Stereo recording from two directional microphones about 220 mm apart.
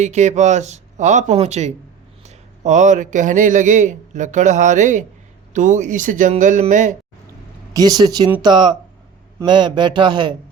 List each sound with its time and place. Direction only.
0.0 s a man's voice: 30° right (ahead or behind)
7.7 s a man's voice: 15° right (ahead or behind)